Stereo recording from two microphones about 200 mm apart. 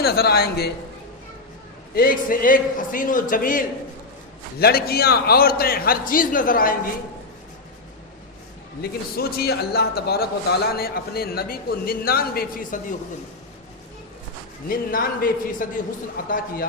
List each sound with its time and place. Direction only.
0.0 s a man's voice: 50° left (ahead or behind)
2.0 s a man's voice: 45° left (ahead or behind)
4.6 s a man's voice: 50° left (ahead or behind)
8.8 s a man's voice: 50° left (ahead or behind)
14.7 s a man's voice: 45° left (ahead or behind)